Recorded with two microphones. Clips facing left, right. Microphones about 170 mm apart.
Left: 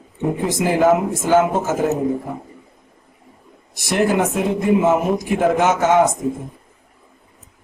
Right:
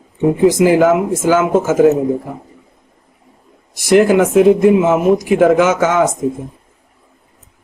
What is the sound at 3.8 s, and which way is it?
Speech, 90° right.